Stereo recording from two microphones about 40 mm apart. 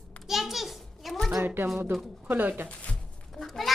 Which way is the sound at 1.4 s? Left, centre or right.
Right.